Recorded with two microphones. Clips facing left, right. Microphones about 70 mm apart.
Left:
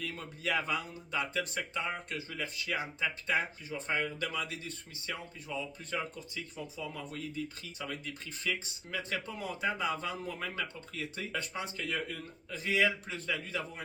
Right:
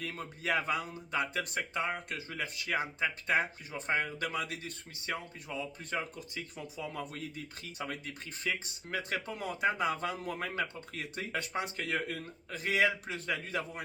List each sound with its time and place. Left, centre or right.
0.0 s speech: right
6.1 s speech: right